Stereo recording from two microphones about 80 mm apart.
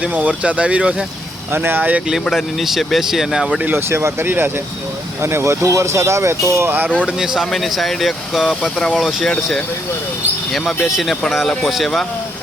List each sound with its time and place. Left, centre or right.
0.0 s speech: centre
1.5 s speech: right
2.2 s speech: centre
3.7 s speech: right
7.3 s speech: centre
8.6 s speech: centre
8.9 s speech: centre
9.3 s speech: centre
10.8 s speech: centre